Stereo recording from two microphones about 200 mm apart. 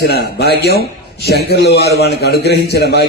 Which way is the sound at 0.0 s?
55° left (ahead or behind).